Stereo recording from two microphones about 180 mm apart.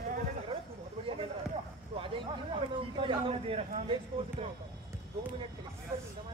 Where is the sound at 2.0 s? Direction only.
30° right (ahead or behind).